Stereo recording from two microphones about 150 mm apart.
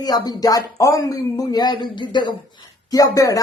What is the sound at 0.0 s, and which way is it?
Speech, 25° left (ahead or behind).